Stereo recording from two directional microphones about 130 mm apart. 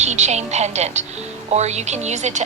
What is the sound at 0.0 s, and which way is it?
A woman's voice, 60° right (ahead or behind).